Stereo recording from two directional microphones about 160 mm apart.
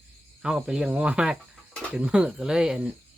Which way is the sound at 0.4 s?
5° right (ahead or behind).